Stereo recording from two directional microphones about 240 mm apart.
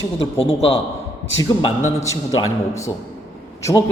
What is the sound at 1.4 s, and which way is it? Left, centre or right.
Speech, centre.